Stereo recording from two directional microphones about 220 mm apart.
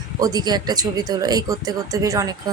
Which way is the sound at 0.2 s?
15° right (ahead or behind).